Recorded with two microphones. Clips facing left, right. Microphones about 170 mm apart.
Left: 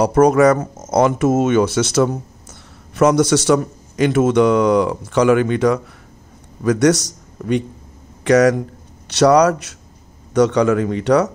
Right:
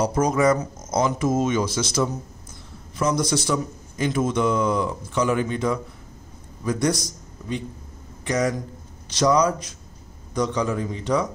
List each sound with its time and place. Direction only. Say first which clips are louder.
0.0 s a man's voice: left 8 dB; 65° left (ahead or behind)